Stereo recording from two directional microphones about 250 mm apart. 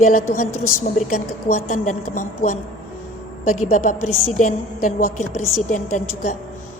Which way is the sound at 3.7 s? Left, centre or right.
Left.